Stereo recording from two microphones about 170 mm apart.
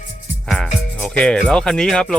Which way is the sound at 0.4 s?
5° left (ahead or behind).